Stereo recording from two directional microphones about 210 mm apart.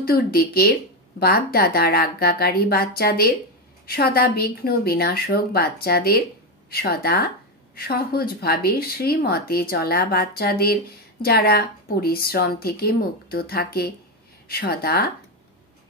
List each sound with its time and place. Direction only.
0.0 s speech: 45° left (ahead or behind)